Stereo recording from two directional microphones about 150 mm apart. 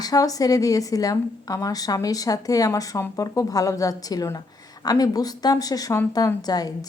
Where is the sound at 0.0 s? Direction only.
25° left (ahead or behind).